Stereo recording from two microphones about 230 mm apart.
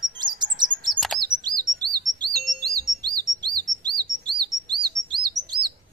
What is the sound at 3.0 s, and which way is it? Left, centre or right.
Chirp, centre.